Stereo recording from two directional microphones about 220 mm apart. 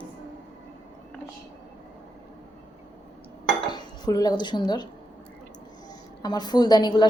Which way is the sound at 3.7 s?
20° left (ahead or behind).